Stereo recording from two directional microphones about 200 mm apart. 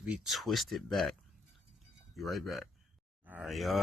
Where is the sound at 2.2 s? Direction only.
Centre (ahead or behind).